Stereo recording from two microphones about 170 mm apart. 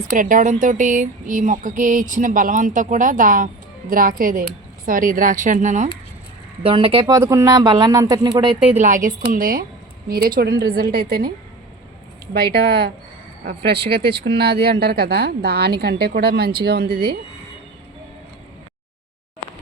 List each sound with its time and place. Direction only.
0.1 s speech: 50° right (ahead or behind)
6.6 s speech: 30° right (ahead or behind)
7.1 s speech: 15° right (ahead or behind)
8.7 s a woman's voice: 50° right (ahead or behind); by 11.3 s 65° right (ahead or behind)
12.3 s speech: 75° right (ahead or behind)
14.1 s speech: 70° right (ahead or behind)